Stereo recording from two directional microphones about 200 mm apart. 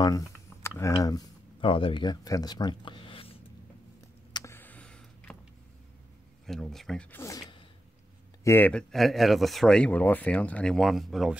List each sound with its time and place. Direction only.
0.0 s speech: 15° left (ahead or behind)
4.3 s a sound: 15° left (ahead or behind)
6.4 s speech: centre (ahead or behind); by 7.6 s 20° left (ahead or behind)
8.5 s speech: 10° left (ahead or behind)